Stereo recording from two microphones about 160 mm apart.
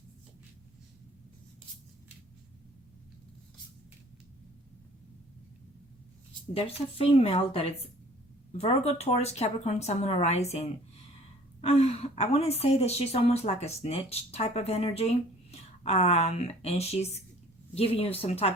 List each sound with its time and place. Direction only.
6.5 s a woman's voice: 35° left (ahead or behind)